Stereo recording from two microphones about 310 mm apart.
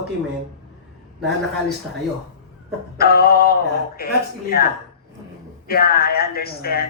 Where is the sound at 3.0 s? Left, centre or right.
Left.